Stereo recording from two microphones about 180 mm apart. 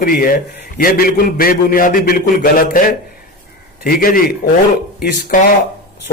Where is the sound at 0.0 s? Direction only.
55° left (ahead or behind).